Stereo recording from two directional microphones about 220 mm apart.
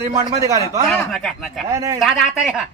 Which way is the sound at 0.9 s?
Centre (ahead or behind).